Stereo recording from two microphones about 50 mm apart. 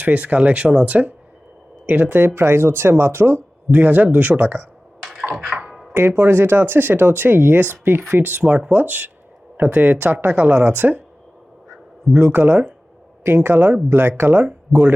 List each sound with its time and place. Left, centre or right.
0.0 s speech: right
0.9 s speech: right
2.3 s speech: right
3.7 s speech: right
5.3 s a sound: centre
6.1 s speech: right
8.4 s speech: right
8.8 s speech: right
12.1 s speech: centre
13.2 s speech: right
14.7 s speech: centre